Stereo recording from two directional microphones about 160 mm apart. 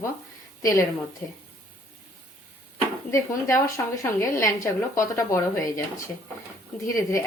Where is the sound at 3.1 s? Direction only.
20° left (ahead or behind).